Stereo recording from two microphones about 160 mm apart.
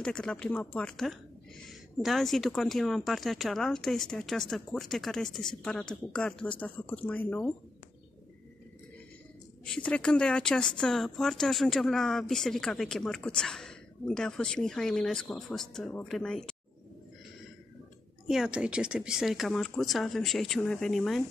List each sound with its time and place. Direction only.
0.0 s speech: 5° left (ahead or behind)
9.7 s speech: 10° left (ahead or behind)
18.2 s speech: centre (ahead or behind)